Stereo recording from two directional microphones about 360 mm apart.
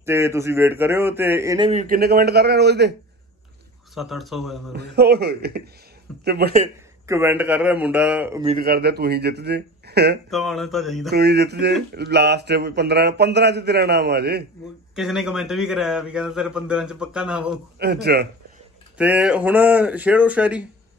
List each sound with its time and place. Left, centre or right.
0.0 s speech: centre; by 2.9 s right
3.9 s a man's voice: centre
4.7 s speech: right
7.1 s a man's voice: centre
8.5 s speech: right
10.3 s a man's voice: centre
11.1 s speech: right
15.0 s a man's voice: centre
17.7 s speech: right
18.9 s a man's voice: centre